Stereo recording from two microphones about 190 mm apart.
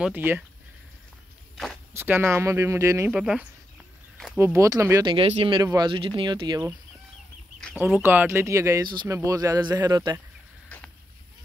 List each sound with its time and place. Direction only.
0.0 s speech: 10° right (ahead or behind)
2.0 s speech: 10° right (ahead or behind)
8.0 s speech: 10° right (ahead or behind)